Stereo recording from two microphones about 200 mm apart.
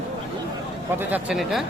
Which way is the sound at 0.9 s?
5° right (ahead or behind).